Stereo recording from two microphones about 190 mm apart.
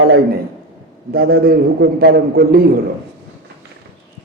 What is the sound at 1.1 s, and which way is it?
Speech, 55° right (ahead or behind).